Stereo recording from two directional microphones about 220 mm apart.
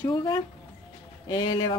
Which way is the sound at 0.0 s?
15° left (ahead or behind).